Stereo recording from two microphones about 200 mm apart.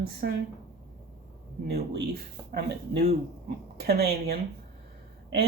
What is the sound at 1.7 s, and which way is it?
Speech, 55° right (ahead or behind).